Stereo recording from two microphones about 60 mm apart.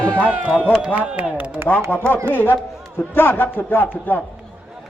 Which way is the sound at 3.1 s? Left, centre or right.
Left.